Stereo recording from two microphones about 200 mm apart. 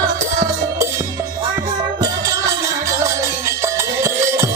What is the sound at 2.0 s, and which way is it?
Music, 20° right (ahead or behind).